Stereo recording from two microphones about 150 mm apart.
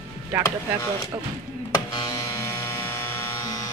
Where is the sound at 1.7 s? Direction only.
25° left (ahead or behind).